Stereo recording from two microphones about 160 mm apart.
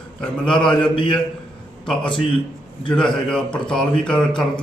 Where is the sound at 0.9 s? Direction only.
30° left (ahead or behind).